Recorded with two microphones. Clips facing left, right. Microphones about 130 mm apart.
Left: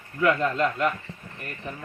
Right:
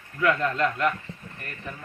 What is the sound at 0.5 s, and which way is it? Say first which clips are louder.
Speech: even; 5° left (ahead or behind).